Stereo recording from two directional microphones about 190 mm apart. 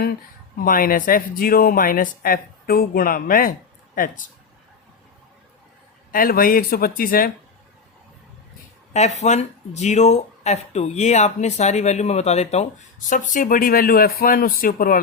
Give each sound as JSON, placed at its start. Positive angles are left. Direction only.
{"t": 0.6, "sound": "speech", "side_deg": 50}
{"t": 6.1, "sound": "speech", "side_deg": 50}
{"t": 8.9, "sound": "speech", "side_deg": 35}